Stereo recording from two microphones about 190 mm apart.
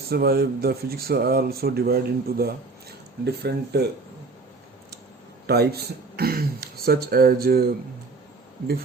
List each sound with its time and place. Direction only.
0.1 s speech: 55° right (ahead or behind)
5.5 s speech: 55° right (ahead or behind)